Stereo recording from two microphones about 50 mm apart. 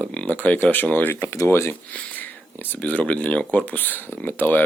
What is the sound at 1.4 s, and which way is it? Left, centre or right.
Speech, left.